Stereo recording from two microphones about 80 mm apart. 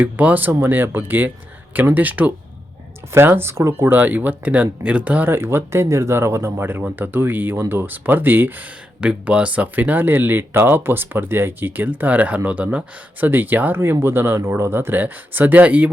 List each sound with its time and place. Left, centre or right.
0.0 s speech: centre
9.0 s speech: centre